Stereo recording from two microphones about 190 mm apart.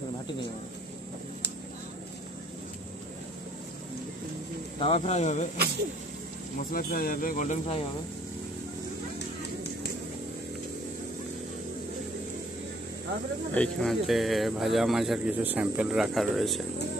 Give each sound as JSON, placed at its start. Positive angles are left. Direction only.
{"t": 4.7, "sound": "speech", "side_deg": 30}
{"t": 6.7, "sound": "speech", "side_deg": 50}
{"t": 13.6, "sound": "speech", "side_deg": 0}